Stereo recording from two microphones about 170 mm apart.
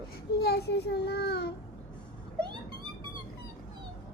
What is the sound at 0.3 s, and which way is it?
A child's voice, 70° left (ahead or behind).